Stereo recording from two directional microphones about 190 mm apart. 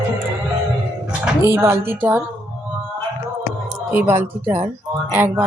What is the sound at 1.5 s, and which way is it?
Music, 10° right (ahead or behind).